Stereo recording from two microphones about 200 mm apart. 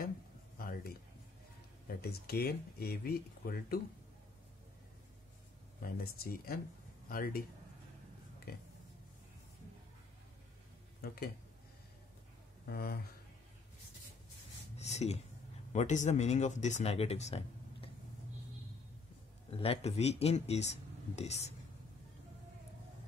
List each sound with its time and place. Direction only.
0.6 s a sound: 45° left (ahead or behind)
2.0 s speech: 50° left (ahead or behind)
5.8 s speech: 50° left (ahead or behind)
8.5 s speech: 50° left (ahead or behind)
12.6 s speech: 50° left (ahead or behind)
14.8 s a sound: 35° left (ahead or behind)
15.7 s speech: 35° left (ahead or behind)
19.5 s speech: 30° left (ahead or behind)